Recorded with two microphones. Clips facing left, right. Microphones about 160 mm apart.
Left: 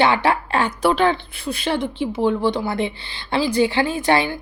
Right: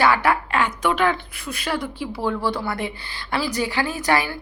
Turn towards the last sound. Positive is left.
turn(degrees=25)  # may be behind; listen again after turning